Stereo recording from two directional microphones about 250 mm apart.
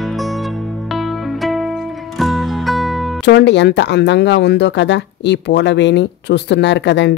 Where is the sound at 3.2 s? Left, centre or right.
Left.